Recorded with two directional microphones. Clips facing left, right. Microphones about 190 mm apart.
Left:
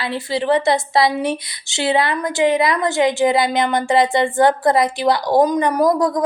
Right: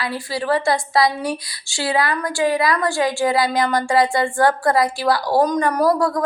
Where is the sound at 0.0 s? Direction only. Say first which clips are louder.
Left 3 dB; 25° left (ahead or behind).